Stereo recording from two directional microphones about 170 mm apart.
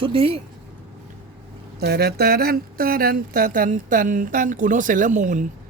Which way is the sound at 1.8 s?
70° right (ahead or behind).